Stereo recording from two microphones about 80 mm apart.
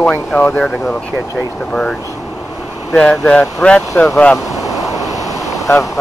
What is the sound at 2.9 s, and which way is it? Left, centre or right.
Speech, centre.